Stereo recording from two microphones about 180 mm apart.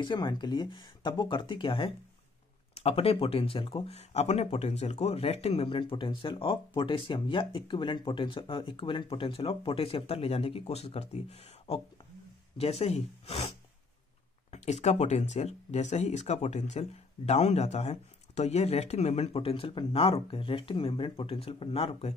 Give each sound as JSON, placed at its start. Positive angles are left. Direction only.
{"t": 0.0, "sound": "speech", "side_deg": 25}